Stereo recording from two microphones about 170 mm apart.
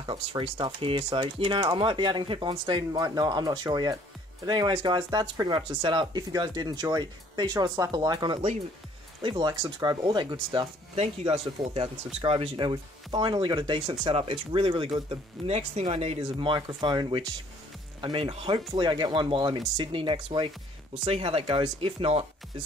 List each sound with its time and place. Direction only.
0.0 s speech: 30° right (ahead or behind)